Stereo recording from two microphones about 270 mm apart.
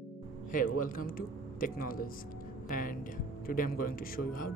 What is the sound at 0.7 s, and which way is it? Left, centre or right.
Speech, left.